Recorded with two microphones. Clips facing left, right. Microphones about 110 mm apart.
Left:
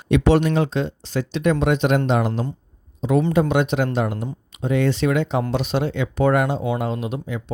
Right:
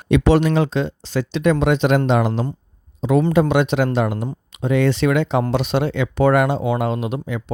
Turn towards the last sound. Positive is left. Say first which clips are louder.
# right 3 dB
turn(degrees=-75)  # may be behind; listen again after turning